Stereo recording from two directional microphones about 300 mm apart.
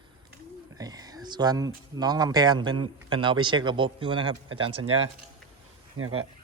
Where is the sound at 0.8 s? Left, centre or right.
Centre.